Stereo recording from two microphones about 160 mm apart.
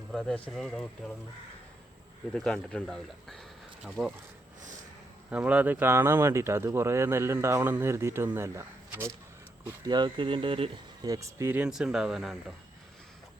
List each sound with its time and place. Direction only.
0.1 s speech: 5° left (ahead or behind)
2.3 s speech: 5° left (ahead or behind)
5.3 s speech: 10° right (ahead or behind); by 10.7 s 35° right (ahead or behind)
11.0 s speech: 20° right (ahead or behind); by 12.5 s centre (ahead or behind)